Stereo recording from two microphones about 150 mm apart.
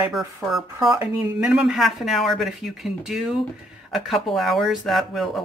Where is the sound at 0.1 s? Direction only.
Centre (ahead or behind).